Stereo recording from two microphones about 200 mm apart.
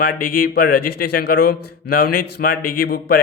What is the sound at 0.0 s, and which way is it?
Speech, 45° left (ahead or behind).